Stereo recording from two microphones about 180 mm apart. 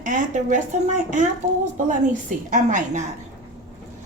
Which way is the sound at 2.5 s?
45° right (ahead or behind).